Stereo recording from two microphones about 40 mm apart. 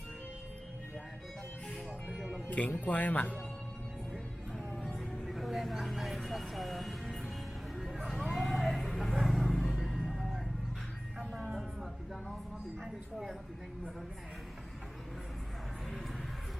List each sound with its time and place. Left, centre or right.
2.1 s music: centre
2.5 s speech: left
4.9 s music: centre
6.2 s vehicle: centre
7.8 s a sound: centre
8.2 s vehicle: centre
9.7 s music: centre